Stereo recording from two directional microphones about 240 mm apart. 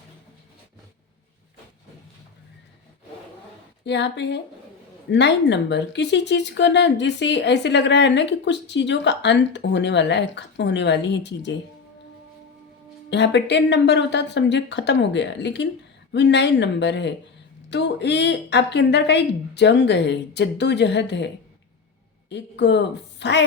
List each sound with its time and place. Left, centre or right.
3.8 s speech: left
13.1 s speech: left